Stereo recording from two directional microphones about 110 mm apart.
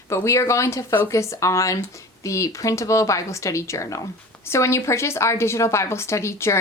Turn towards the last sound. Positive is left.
turn(degrees=25)  # may be behind; listen again after turning